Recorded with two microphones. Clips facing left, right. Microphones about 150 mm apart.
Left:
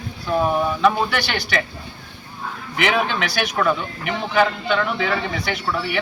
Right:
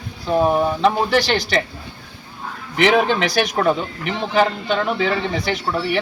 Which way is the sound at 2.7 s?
35° right (ahead or behind).